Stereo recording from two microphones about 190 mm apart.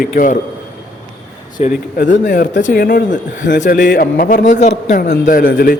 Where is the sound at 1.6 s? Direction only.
45° left (ahead or behind).